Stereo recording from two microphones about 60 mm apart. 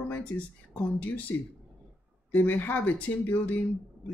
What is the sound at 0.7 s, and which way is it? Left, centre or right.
Speech, left.